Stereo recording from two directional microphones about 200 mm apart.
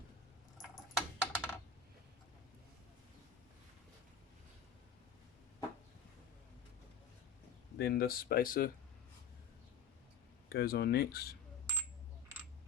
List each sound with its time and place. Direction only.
0.6 s a sound: 5° left (ahead or behind)
7.8 s speech: 50° left (ahead or behind)
10.5 s speech: 50° left (ahead or behind)